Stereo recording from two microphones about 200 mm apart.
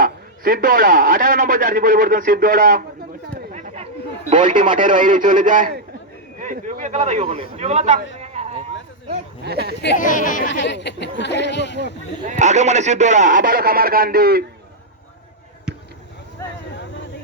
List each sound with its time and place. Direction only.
0.0 s a man's voice: 45° right (ahead or behind)
3.5 s chatter: 35° right (ahead or behind)
4.3 s a man's voice: 35° right (ahead or behind)
8.2 s a sound: 35° right (ahead or behind)
9.0 s a sound: 55° right (ahead or behind)
10.0 s speech: 40° left (ahead or behind)
10.5 s speech: 65° left (ahead or behind)
12.2 s a man's voice: 35° right (ahead or behind)